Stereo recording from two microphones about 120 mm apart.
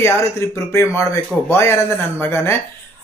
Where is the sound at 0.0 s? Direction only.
25° left (ahead or behind).